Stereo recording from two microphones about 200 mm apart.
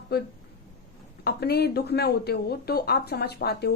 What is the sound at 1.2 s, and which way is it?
Speech, 50° left (ahead or behind).